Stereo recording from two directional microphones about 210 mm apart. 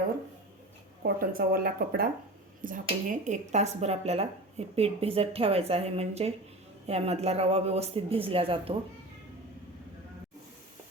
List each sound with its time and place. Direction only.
1.0 s speech: 45° right (ahead or behind); by 8.8 s 25° right (ahead or behind)